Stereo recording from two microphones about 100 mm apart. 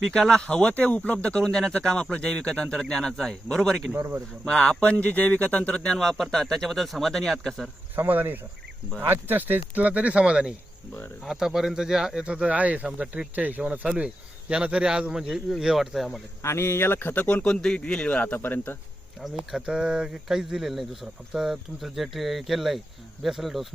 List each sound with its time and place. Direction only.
0.0 s speech: 5° left (ahead or behind)
3.9 s speech: 25° right (ahead or behind)
4.4 s speech: 10° left (ahead or behind)
7.9 s speech: 20° right (ahead or behind); by 16.2 s centre (ahead or behind)
16.4 s a man's voice: 25° left (ahead or behind)
19.5 s speech: 5° right (ahead or behind)